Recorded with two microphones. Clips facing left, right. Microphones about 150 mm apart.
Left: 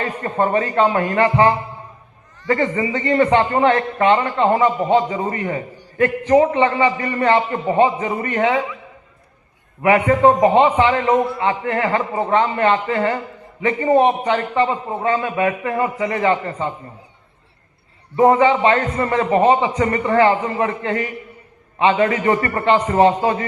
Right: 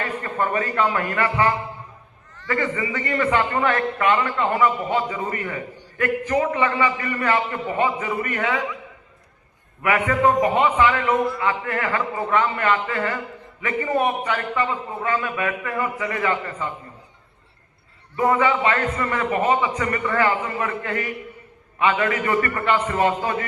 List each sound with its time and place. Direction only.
0.0 s a man's voice: 30° left (ahead or behind)
9.8 s a man's voice: 30° left (ahead or behind)
18.2 s a man's voice: 30° left (ahead or behind)
22.6 s a man's voice: 25° left (ahead or behind)